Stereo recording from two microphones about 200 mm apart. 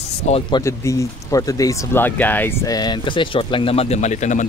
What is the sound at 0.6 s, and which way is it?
Speech, 15° left (ahead or behind).